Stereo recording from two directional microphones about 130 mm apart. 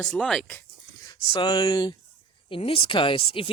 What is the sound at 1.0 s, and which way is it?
Speech, 35° left (ahead or behind).